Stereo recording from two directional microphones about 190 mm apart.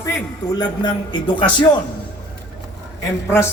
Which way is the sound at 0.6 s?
25° left (ahead or behind).